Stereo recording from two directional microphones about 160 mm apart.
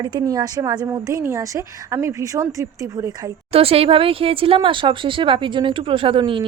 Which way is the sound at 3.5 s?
35° right (ahead or behind).